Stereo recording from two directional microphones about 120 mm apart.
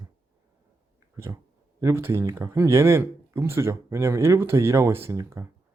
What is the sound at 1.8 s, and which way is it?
Speech, 20° right (ahead or behind).